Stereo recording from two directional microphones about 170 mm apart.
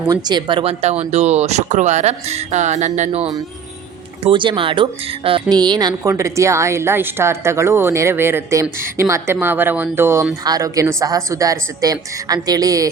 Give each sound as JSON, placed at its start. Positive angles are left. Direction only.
{"t": 0.1, "sound": "speech", "side_deg": -25}
{"t": 4.2, "sound": "a woman's voice", "side_deg": -30}